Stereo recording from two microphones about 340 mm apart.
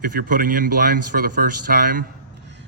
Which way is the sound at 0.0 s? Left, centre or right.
Right.